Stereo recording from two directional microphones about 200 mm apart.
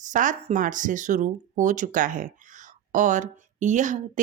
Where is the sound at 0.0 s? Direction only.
40° right (ahead or behind).